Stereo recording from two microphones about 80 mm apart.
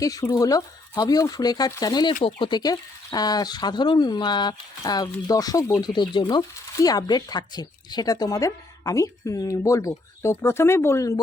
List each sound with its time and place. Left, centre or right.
0.0 s speech: left
5.9 s speech: left
6.7 s speech: left